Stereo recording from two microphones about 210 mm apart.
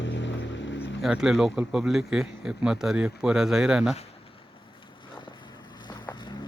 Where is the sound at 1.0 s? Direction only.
Centre (ahead or behind).